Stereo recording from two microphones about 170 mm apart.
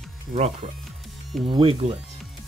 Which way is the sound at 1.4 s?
30° right (ahead or behind).